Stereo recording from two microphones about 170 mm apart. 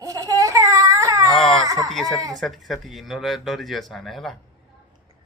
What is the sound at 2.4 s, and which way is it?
Speech, centre (ahead or behind).